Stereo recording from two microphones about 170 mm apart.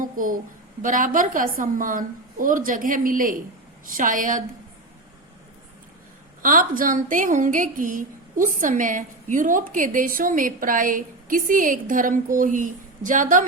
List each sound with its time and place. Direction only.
0.0 s a sound: 50° right (ahead or behind)
0.8 s a woman's voice: 50° right (ahead or behind)
6.4 s a woman's voice: 55° right (ahead or behind)